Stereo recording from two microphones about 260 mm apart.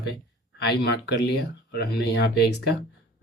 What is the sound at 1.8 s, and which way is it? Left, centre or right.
Speech, left.